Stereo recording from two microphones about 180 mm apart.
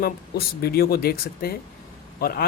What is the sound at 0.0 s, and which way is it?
Speech, 60° left (ahead or behind).